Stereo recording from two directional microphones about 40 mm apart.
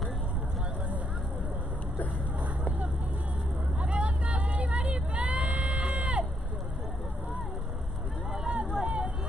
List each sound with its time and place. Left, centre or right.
3.8 s vehicle: right
8.5 s vehicle: right